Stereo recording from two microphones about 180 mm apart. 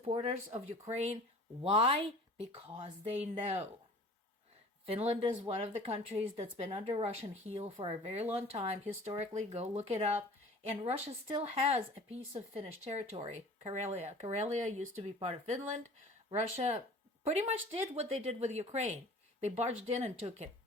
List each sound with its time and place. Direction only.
0.0 s speech: 35° right (ahead or behind)
4.9 s speech: 30° right (ahead or behind)